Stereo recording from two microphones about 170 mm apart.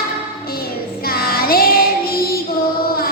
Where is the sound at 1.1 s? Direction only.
60° left (ahead or behind).